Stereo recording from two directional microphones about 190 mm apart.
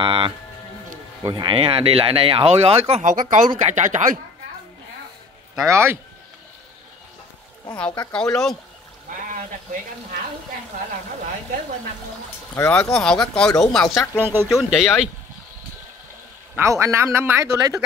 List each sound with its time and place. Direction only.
0.0 s speech: 25° right (ahead or behind)
5.7 s a man's voice: 15° right (ahead or behind)
8.1 s speech: 5° left (ahead or behind)
9.1 s a sound: 45° right (ahead or behind)
12.5 s speech: 15° left (ahead or behind)
14.1 s a man's voice: 10° right (ahead or behind)
16.5 s a man's voice: 15° right (ahead or behind)